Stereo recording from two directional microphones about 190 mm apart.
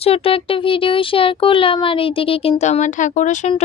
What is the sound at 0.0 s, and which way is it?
A woman's voice, 30° left (ahead or behind).